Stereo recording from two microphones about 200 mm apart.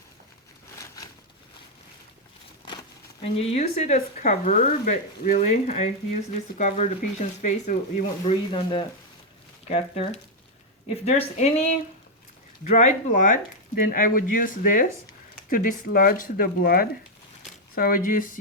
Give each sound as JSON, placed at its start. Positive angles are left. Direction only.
{"t": 3.3, "sound": "speech", "side_deg": 30}
{"t": 9.6, "sound": "speech", "side_deg": 30}